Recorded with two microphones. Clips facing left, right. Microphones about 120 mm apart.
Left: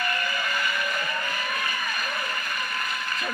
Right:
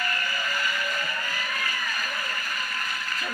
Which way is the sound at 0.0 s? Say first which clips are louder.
Left 2 dB; 20° left (ahead or behind).